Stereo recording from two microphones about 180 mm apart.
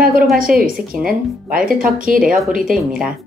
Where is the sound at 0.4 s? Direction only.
50° right (ahead or behind).